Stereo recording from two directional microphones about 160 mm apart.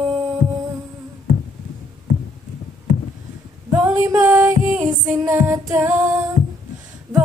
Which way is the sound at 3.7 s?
10° right (ahead or behind).